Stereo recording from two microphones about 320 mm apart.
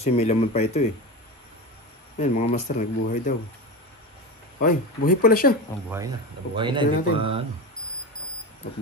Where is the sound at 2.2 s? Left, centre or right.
Left.